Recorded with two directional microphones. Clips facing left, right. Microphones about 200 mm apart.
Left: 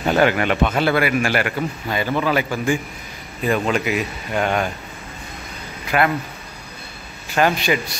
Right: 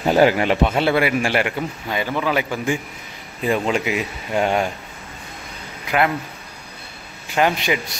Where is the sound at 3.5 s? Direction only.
25° right (ahead or behind).